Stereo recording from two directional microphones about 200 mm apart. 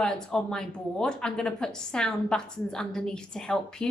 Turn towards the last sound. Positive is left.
turn(degrees=5)  # may be behind; listen again after turning